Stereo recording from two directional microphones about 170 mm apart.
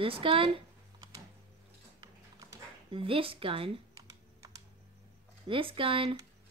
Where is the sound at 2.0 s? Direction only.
25° right (ahead or behind).